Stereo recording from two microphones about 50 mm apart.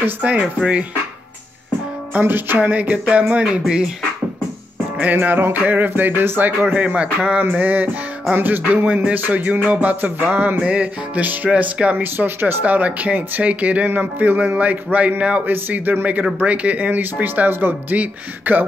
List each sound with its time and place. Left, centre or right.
0.0 s speech: right
2.1 s music: right
2.6 s speech: right
5.1 s speech: right
6.7 s speech: right
7.6 s music: right
10.6 s speech: right
12.0 s speech: right
12.6 s speech: right
13.8 s music: right
15.4 s music: right
17.9 s music: right